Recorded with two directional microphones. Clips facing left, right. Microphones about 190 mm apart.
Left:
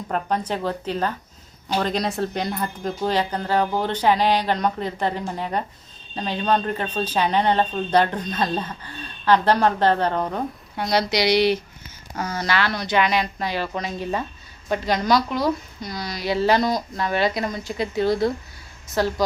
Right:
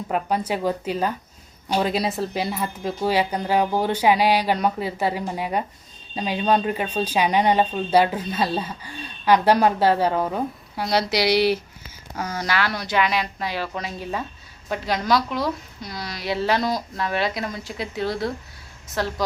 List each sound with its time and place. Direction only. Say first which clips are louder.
0.1 s a woman's voice: right 1 dB; 10° right (ahead or behind)